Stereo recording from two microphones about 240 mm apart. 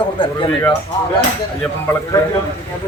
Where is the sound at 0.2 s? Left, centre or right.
Centre.